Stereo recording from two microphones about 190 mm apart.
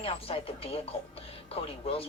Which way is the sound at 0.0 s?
30° left (ahead or behind).